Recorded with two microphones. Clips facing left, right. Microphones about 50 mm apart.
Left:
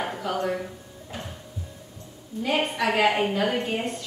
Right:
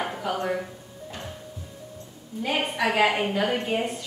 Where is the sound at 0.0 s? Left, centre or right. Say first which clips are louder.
Left 1 dB; centre.